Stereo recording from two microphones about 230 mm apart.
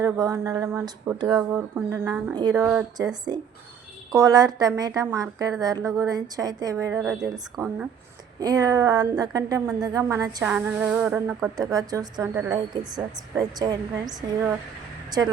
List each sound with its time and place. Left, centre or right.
0.0 s a woman's voice: centre
7.0 s speech: centre
7.6 s a woman's voice: centre